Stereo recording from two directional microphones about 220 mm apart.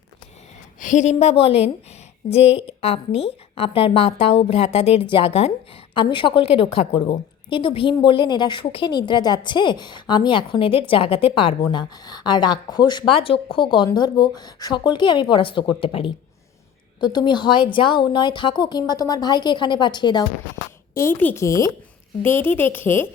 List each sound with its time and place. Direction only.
0.8 s a woman's voice: 35° left (ahead or behind); by 23.0 s 10° left (ahead or behind)